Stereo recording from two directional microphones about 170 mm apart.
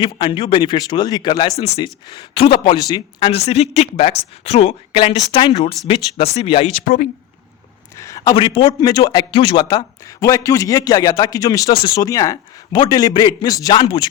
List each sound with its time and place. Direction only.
0.0 s a man's voice: 30° left (ahead or behind)
1.5 s speech: 35° left (ahead or behind)
7.9 s a man's voice: 20° left (ahead or behind)